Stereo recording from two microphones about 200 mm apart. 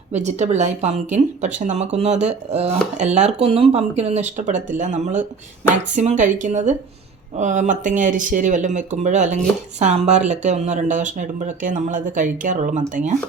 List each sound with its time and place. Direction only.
0.1 s speech: 35° right (ahead or behind)